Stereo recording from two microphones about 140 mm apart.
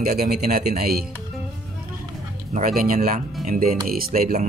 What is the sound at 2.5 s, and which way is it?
Speech, 80° right.